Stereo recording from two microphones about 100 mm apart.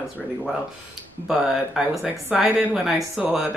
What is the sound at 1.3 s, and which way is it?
Speech, 5° right (ahead or behind).